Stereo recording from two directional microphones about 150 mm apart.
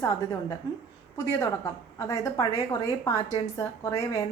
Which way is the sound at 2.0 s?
20° left (ahead or behind).